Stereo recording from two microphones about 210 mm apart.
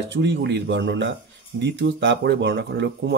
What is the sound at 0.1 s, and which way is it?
Speech, 55° right (ahead or behind).